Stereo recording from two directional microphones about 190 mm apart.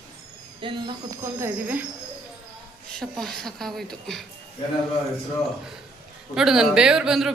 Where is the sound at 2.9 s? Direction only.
Centre (ahead or behind).